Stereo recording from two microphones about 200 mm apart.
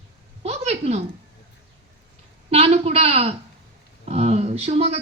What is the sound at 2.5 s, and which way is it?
Speech, 30° right (ahead or behind).